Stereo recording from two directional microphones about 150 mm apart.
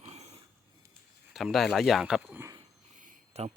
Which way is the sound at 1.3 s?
Centre (ahead or behind).